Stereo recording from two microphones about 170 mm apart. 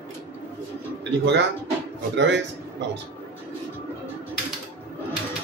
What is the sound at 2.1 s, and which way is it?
Speech, 90° right.